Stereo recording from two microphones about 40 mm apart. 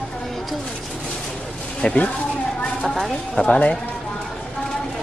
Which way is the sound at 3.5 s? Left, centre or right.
Left.